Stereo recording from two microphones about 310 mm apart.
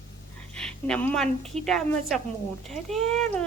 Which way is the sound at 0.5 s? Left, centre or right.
Centre.